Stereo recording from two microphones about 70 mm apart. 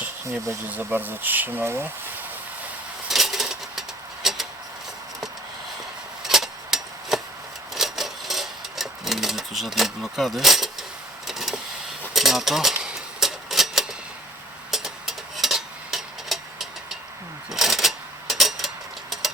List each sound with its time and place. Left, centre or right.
0.7 s speech: right
1.6 s speech: right
3.1 s rub: centre
6.2 s tick-tock: centre
7.8 s sewing machine: centre
11.3 s vehicle: centre
12.1 s typewriter: centre
14.7 s tick-tock: centre
17.5 s a sound: centre
19.1 s engine: centre